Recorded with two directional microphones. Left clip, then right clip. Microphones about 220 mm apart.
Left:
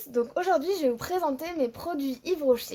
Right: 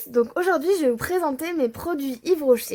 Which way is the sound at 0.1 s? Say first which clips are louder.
Right 4 dB; 45° right (ahead or behind).